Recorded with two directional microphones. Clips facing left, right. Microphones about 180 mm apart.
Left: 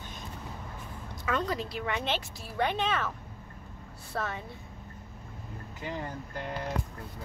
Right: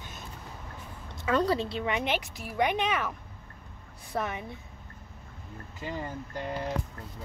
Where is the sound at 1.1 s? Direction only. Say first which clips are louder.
Right 5 dB; 30° right (ahead or behind).